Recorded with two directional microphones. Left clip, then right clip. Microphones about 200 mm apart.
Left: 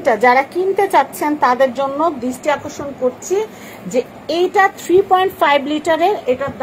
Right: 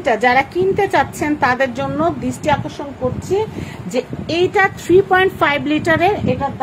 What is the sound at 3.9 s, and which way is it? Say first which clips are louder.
A child's voice: left 2 dB; 25° right (ahead or behind).